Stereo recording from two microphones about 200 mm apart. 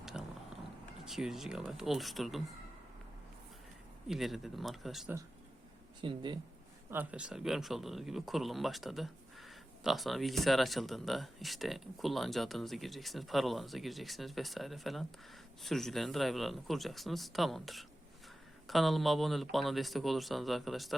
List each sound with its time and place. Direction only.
0.0 s a sound: centre (ahead or behind)
1.0 s speech: centre (ahead or behind)
4.1 s speech: centre (ahead or behind)
6.0 s speech: 25° right (ahead or behind)
6.9 s speech: 5° right (ahead or behind)